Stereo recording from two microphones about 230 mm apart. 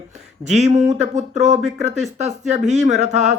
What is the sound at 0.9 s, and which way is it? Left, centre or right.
Speech, right.